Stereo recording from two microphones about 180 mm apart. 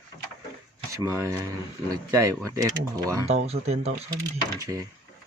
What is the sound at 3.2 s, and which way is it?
Speech, 35° right (ahead or behind).